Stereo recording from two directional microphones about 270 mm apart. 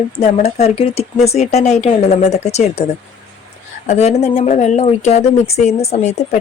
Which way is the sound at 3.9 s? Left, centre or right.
Left.